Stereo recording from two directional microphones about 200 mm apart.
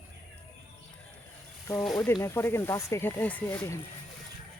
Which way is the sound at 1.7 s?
5° left (ahead or behind).